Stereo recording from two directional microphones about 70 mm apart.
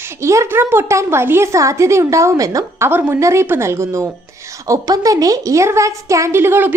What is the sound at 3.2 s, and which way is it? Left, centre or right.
Speech, right.